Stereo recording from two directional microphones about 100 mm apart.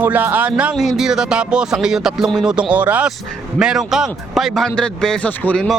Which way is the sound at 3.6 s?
5° right (ahead or behind).